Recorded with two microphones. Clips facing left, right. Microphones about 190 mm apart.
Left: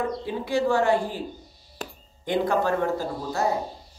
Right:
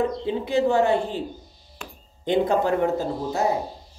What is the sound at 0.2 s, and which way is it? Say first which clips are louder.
Speech: right 3 dB; 20° right (ahead or behind).